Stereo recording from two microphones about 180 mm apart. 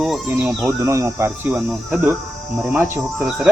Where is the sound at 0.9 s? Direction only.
15° right (ahead or behind).